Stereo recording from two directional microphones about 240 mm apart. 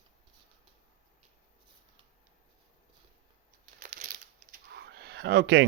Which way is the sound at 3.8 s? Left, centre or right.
Right.